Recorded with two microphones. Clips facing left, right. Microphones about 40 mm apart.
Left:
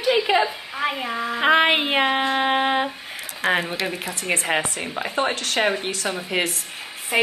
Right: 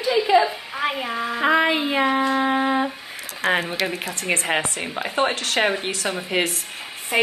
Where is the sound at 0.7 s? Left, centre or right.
Centre.